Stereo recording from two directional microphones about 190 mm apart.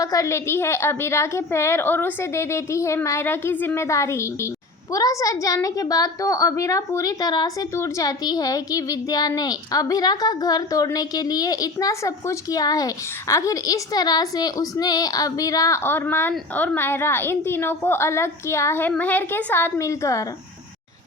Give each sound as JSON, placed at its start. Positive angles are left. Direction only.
{"t": 0.0, "sound": "a woman's voice", "side_deg": 20}